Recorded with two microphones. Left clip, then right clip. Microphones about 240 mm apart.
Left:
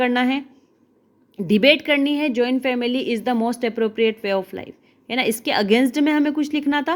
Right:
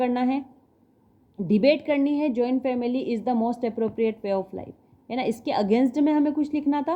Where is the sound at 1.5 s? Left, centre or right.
Left.